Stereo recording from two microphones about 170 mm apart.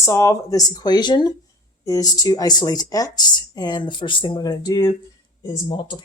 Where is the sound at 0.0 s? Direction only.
15° left (ahead or behind).